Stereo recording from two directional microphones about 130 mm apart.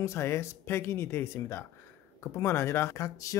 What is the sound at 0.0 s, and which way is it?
Speech, 20° left (ahead or behind).